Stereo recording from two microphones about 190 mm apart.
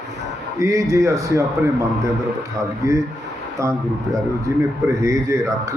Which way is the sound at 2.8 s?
15° right (ahead or behind).